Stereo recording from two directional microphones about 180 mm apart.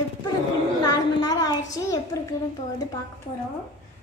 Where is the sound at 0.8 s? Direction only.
20° left (ahead or behind).